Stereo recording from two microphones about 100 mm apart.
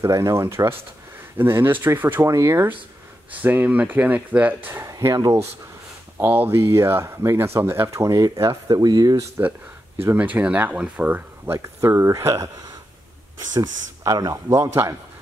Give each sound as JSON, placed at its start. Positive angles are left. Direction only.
{"t": 0.0, "sound": "speech", "side_deg": -30}
{"t": 3.3, "sound": "speech", "side_deg": -15}
{"t": 4.8, "sound": "speech", "side_deg": -35}
{"t": 6.1, "sound": "speech", "side_deg": -20}
{"t": 8.4, "sound": "speech", "side_deg": -45}
{"t": 10.0, "sound": "speech", "side_deg": -20}
{"t": 13.5, "sound": "speech", "side_deg": -40}